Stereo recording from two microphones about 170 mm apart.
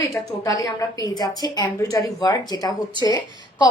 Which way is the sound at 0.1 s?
20° left (ahead or behind).